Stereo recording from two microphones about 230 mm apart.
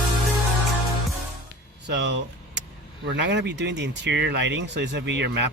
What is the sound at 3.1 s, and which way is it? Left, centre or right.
Speech, right.